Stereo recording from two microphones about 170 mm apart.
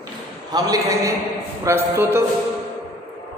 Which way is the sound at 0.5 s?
20° right (ahead or behind).